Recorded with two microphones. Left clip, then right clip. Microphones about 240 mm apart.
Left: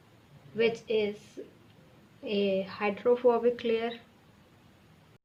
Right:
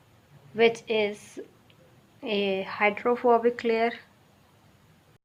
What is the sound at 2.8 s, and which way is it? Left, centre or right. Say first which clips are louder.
Speech: right 4 dB; centre.